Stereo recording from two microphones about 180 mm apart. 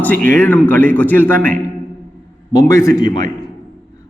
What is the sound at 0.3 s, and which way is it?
A man's voice, 10° left (ahead or behind).